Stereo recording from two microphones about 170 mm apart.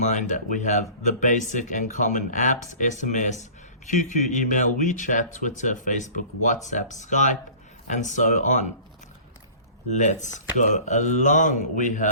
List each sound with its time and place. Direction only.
0.0 s speech: 45° left (ahead or behind)
9.9 s speech: 45° left (ahead or behind)